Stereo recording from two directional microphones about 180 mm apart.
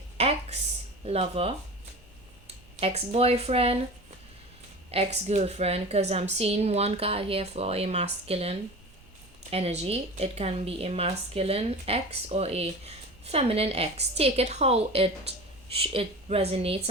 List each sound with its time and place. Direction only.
1.0 s speech: 35° right (ahead or behind)
2.8 s speech: 35° right (ahead or behind)
4.9 s speech: 35° right (ahead or behind)